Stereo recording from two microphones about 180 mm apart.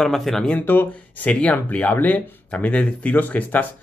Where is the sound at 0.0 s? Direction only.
Centre (ahead or behind).